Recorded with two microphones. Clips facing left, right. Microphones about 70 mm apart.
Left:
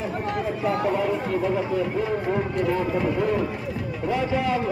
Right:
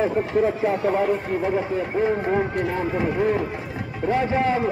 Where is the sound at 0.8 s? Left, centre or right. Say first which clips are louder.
Right 2 dB; right.